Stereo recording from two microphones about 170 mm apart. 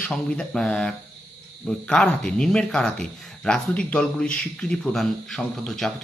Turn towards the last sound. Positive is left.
turn(degrees=5)  # may be behind; listen again after turning